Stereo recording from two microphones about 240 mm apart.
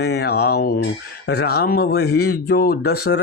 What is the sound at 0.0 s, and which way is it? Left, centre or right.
Speech, left.